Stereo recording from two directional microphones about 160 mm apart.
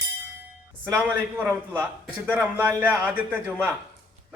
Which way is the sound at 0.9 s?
10° right (ahead or behind).